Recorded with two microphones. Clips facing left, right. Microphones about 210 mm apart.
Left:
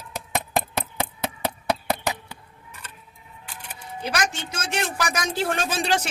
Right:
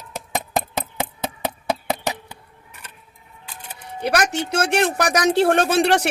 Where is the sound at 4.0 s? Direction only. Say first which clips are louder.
Right 7 dB; 65° right (ahead or behind).